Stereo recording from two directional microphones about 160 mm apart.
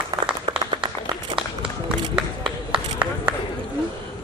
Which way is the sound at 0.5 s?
30° right (ahead or behind).